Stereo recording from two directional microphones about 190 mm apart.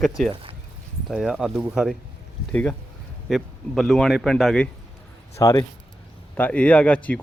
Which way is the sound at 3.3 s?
Centre (ahead or behind).